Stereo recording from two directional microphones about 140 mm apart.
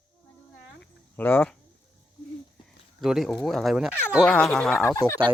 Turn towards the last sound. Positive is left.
turn(degrees=20)  # may be behind; listen again after turning